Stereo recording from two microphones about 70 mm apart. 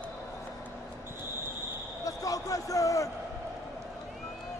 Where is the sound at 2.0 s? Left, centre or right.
Left.